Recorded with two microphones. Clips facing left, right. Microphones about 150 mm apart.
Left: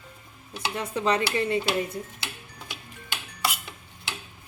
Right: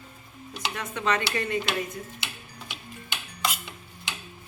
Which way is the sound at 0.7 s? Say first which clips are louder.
Left 3 dB; 30° left (ahead or behind).